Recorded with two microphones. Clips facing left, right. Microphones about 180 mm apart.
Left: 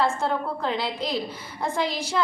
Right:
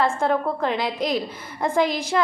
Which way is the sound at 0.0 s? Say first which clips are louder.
Right 3 dB; 85° right.